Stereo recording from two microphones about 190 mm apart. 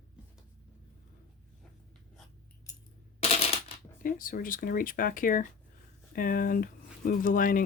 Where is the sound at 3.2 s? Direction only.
30° left (ahead or behind).